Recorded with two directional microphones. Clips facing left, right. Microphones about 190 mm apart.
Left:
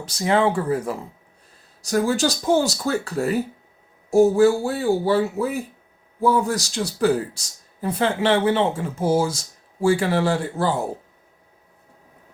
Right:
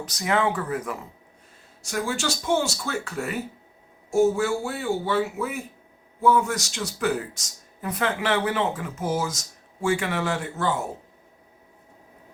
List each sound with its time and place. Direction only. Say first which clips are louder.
0.0 s speech: left 4 dB; 30° left (ahead or behind)